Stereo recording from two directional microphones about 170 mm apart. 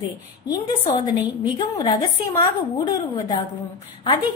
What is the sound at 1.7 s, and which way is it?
A woman's voice, 25° left (ahead or behind).